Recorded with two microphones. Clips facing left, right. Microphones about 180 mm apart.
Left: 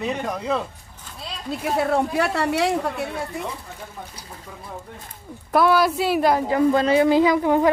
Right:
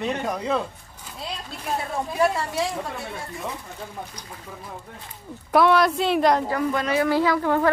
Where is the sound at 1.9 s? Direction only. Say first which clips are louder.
Left 2 dB; 70° left (ahead or behind).